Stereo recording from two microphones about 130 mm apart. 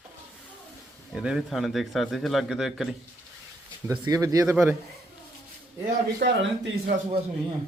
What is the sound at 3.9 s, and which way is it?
Speech, 30° right (ahead or behind).